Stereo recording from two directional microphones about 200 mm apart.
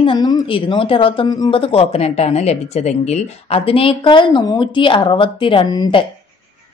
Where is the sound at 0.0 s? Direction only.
25° left (ahead or behind).